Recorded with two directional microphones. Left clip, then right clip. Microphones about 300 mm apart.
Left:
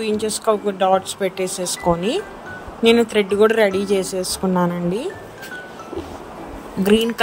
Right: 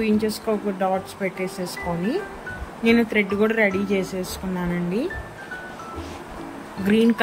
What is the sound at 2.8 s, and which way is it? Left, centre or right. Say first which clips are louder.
A woman's voice: left 5 dB; centre.